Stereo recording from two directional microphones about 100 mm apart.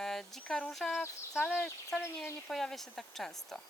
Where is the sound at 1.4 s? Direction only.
20° left (ahead or behind).